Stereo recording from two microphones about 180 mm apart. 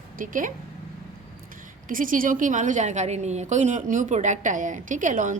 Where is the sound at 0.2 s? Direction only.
45° right (ahead or behind).